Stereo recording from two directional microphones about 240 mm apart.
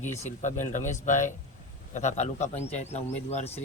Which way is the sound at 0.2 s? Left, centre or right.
Left.